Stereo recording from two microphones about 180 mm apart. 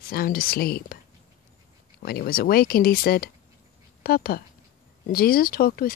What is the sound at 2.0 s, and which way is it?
Speech, 55° left (ahead or behind).